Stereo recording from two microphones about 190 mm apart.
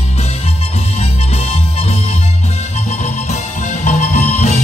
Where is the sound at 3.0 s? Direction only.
40° left (ahead or behind).